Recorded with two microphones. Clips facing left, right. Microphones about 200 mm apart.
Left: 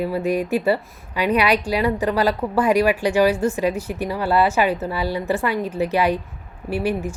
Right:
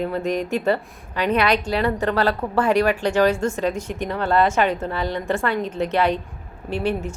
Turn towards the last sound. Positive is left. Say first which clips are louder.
# left 1 dB
turn(degrees=10)  # may be behind; listen again after turning